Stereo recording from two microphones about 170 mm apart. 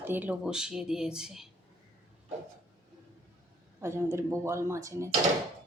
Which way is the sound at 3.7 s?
15° right (ahead or behind).